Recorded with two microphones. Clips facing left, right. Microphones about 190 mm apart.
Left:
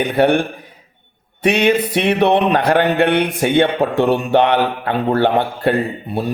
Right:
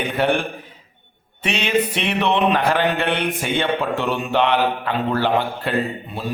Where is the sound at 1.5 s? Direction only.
60° left (ahead or behind).